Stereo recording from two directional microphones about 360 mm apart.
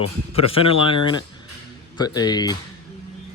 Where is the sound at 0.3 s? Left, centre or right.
Centre.